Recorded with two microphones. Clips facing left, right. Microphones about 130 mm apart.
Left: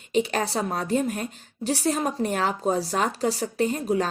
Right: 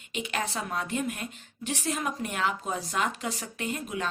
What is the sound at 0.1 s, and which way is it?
A woman's voice, 35° left (ahead or behind).